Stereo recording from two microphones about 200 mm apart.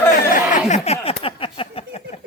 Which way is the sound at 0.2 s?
40° left (ahead or behind).